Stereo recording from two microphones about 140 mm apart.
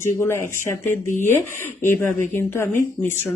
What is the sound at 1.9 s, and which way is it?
Speech, 15° left (ahead or behind).